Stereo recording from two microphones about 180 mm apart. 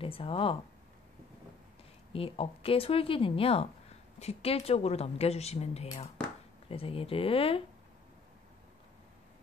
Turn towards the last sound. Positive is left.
turn(degrees=30)  # may be behind; listen again after turning